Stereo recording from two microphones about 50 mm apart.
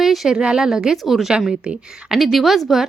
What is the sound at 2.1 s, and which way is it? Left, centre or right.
Speech, centre.